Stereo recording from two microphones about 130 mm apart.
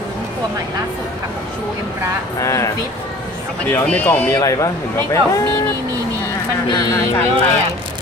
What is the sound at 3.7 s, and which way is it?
Speech, 10° left (ahead or behind).